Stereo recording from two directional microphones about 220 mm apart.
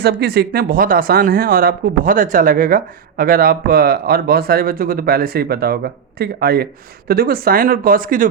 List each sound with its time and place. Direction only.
0.0 s speech: 45° right (ahead or behind)